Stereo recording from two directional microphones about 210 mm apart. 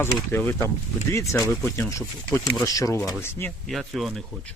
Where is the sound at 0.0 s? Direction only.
10° left (ahead or behind).